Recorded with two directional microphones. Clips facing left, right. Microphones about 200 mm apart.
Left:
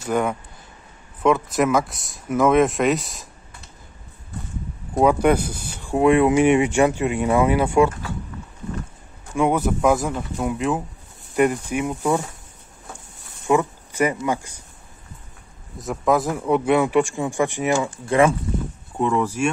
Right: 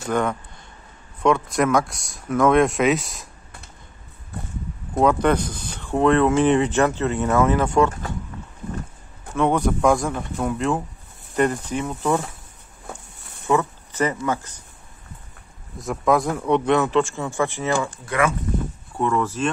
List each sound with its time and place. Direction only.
0.1 s speech: 10° left (ahead or behind)
5.0 s speech: 10° left (ahead or behind)
9.3 s speech: 10° left (ahead or behind)
13.5 s speech: 15° left (ahead or behind)
15.8 s speech: centre (ahead or behind); by 17.7 s 15° left (ahead or behind)
18.0 s speech: 25° left (ahead or behind)